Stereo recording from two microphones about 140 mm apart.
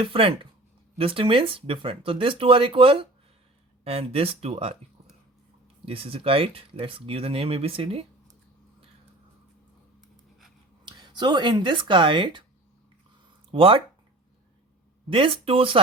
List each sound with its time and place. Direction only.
0.0 s speech: 40° right (ahead or behind)
5.8 s speech: 45° right (ahead or behind)
10.8 s speech: 35° right (ahead or behind)
13.5 s speech: 40° right (ahead or behind)
15.1 s speech: 40° right (ahead or behind)